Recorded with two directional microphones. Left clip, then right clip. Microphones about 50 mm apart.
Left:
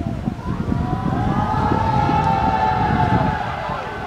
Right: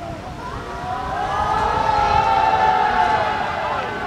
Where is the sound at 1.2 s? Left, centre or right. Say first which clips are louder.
Right 2 dB; right.